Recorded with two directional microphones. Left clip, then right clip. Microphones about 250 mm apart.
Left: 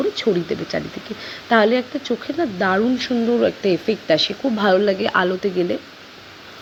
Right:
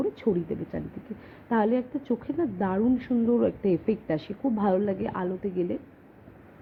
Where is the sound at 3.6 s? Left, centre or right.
Left.